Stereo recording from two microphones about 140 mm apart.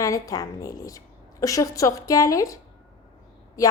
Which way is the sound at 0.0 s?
25° left (ahead or behind).